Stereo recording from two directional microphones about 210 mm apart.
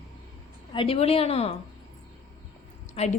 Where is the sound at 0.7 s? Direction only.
30° left (ahead or behind).